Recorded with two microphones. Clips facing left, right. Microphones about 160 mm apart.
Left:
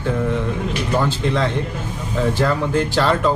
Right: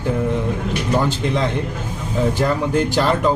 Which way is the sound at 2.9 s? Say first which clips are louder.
Even; 15° right (ahead or behind).